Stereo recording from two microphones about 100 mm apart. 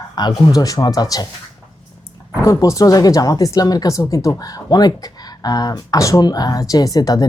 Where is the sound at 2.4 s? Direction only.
35° left (ahead or behind).